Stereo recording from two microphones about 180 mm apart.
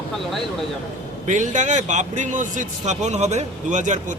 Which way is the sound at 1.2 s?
45° right (ahead or behind).